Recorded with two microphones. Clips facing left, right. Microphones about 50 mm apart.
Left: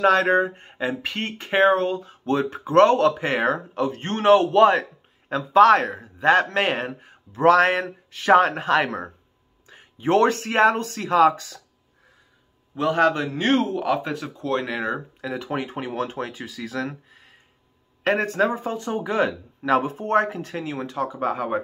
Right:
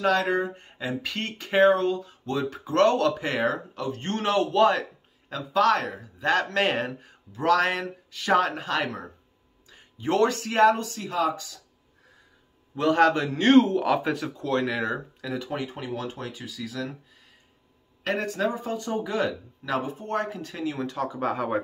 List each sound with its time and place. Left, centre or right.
0.0 s speech: left
6.5 s speech: centre
7.3 s speech: left
12.7 s speech: centre
15.1 s speech: left
20.5 s speech: left